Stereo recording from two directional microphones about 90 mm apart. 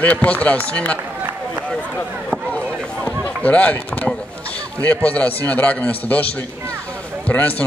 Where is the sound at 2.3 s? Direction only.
15° left (ahead or behind).